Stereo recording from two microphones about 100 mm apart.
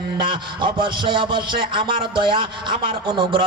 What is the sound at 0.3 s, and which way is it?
A man's voice, 50° right (ahead or behind).